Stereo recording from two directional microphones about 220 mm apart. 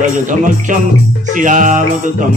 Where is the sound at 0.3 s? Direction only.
35° right (ahead or behind).